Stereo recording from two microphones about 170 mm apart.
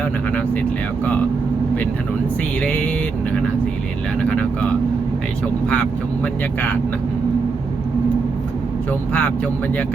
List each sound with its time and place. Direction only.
0.3 s speech: 10° left (ahead or behind)
2.6 s speech: 10° left (ahead or behind)
4.2 s speech: 10° left (ahead or behind)
8.9 s speech: 10° left (ahead or behind)